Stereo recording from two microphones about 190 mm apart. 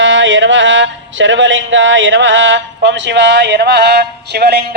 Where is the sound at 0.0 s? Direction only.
75° right (ahead or behind).